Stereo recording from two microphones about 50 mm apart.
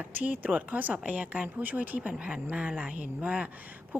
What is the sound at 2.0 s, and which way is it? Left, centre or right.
Speech, right.